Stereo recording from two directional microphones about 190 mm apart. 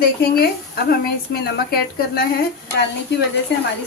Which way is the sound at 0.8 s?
55° left (ahead or behind).